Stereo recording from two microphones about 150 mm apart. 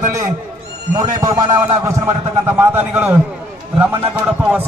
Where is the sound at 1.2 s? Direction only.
20° right (ahead or behind).